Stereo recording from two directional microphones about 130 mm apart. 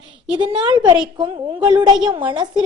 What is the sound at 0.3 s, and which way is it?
A woman's voice, 35° right (ahead or behind).